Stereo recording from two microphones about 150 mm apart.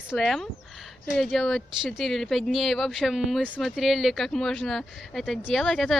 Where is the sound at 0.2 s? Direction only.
Centre (ahead or behind).